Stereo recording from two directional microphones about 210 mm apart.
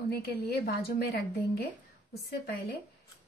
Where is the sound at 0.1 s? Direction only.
50° left (ahead or behind).